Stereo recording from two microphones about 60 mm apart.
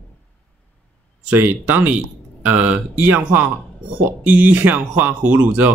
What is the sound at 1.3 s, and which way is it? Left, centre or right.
Speech, right.